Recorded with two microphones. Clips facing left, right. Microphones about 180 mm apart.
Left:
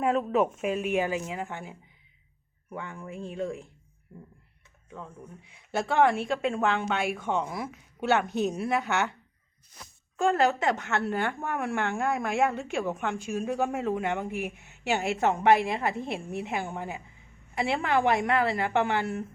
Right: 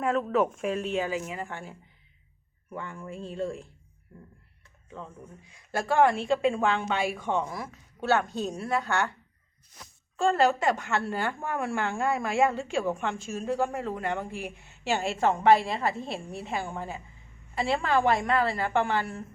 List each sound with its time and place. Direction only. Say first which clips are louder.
0.0 s a woman's voice: left 1 dB; 10° left (ahead or behind)
5.8 s a woman's voice: right 1 dB; centre (ahead or behind)
7.5 s a woman's voice: left 2 dB; 15° left (ahead or behind)
8.5 s a woman's voice: left 1 dB; 5° left (ahead or behind)
8.8 s a woman's voice: even; 20° left (ahead or behind)
10.2 s a woman's voice: even; 15° left (ahead or behind)
10.6 s a woman's voice: even; centre (ahead or behind)
13.1 s a woman's voice: even; 15° left (ahead or behind)